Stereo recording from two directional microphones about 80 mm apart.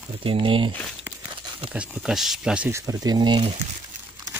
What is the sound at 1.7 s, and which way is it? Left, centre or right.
Speech, centre.